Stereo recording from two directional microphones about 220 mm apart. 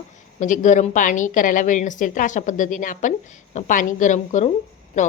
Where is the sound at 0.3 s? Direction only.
35° left (ahead or behind).